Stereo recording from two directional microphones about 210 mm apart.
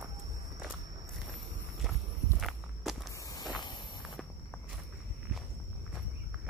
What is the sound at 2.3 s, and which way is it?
Walk, centre (ahead or behind).